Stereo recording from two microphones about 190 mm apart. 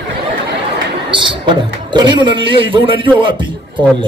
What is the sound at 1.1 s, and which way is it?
A man's voice, 25° right (ahead or behind).